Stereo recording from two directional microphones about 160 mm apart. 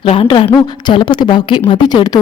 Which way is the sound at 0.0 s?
35° left (ahead or behind).